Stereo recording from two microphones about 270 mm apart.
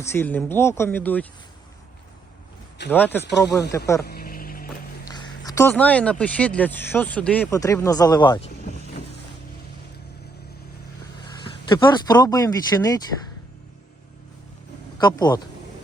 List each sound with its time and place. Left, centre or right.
0.0 s speech: centre
2.9 s speech: centre
4.0 s vehicle: left
5.0 s speech: centre
11.4 s speech: centre
14.9 s speech: centre